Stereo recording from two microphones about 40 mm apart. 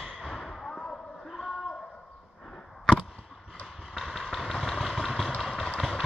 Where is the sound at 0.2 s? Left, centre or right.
Centre.